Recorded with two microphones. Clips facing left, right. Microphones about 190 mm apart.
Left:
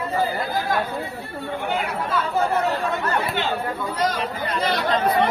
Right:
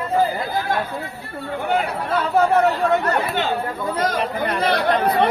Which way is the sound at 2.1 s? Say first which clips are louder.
Right 6 dB; 65° right (ahead or behind).